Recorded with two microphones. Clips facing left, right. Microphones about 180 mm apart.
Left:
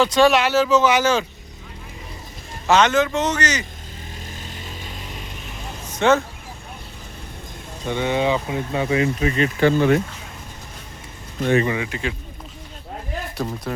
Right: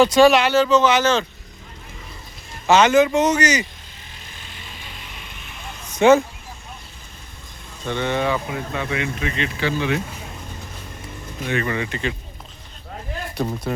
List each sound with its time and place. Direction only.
0.0 s speech: 5° right (ahead or behind); by 1.2 s 10° left (ahead or behind)
2.6 s speech: 5° right (ahead or behind)
4.4 s a sound: 40° left (ahead or behind)
6.0 s speech: 10° right (ahead or behind)
7.9 s speech: 10° left (ahead or behind); by 10.0 s 50° left (ahead or behind)
11.6 s speech: 10° left (ahead or behind)
13.3 s speech: centre (ahead or behind)